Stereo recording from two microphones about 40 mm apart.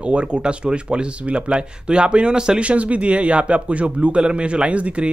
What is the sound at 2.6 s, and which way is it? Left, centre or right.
Speech, right.